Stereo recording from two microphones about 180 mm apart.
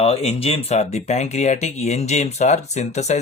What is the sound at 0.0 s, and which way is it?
Speech, 35° left (ahead or behind).